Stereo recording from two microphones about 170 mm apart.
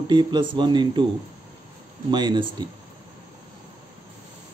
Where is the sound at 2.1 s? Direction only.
25° right (ahead or behind).